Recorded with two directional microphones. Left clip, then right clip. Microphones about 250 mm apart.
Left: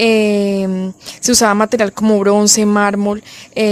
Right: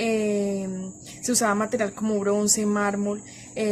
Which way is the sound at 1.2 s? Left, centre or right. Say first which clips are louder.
Left 12 dB; left.